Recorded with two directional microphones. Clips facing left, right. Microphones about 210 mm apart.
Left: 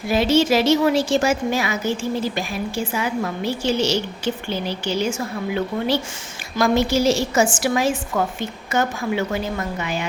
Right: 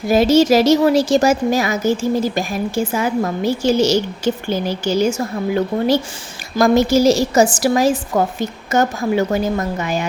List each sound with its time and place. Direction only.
0.1 s a woman's voice: 40° right (ahead or behind)